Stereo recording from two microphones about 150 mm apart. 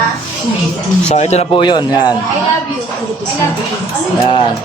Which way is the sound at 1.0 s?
45° left (ahead or behind).